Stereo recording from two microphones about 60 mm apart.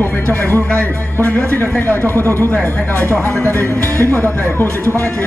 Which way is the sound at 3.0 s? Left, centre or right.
Right.